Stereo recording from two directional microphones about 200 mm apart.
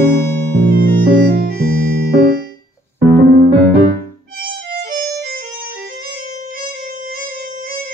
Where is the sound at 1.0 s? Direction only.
50° right (ahead or behind).